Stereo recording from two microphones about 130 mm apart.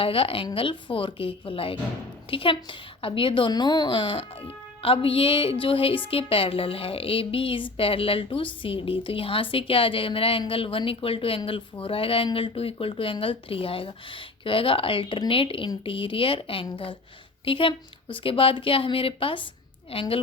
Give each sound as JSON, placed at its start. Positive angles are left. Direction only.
{"t": 0.0, "sound": "a woman's voice", "side_deg": 45}